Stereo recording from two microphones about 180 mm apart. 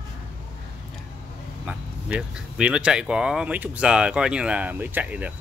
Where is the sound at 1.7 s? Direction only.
5° right (ahead or behind).